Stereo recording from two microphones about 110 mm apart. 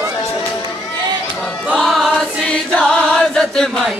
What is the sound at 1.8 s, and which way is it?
Chant, centre (ahead or behind).